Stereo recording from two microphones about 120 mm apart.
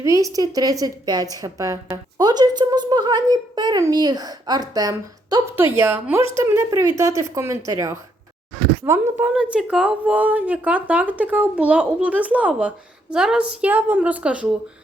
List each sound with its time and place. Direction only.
0.0 s a woman's voice: 25° right (ahead or behind)
9.3 s speech: 5° right (ahead or behind)